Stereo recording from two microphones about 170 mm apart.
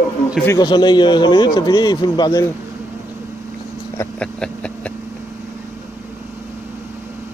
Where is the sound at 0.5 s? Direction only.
25° left (ahead or behind).